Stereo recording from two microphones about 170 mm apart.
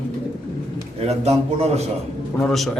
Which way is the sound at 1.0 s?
40° right (ahead or behind).